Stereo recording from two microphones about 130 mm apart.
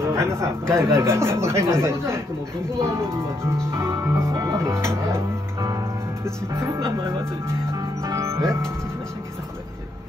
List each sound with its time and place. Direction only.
0.0 s speech: 20° right (ahead or behind)
2.8 s music: 20° right (ahead or behind)
6.2 s speech: 20° right (ahead or behind)